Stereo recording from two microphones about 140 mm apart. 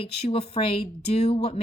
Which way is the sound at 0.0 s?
40° left (ahead or behind).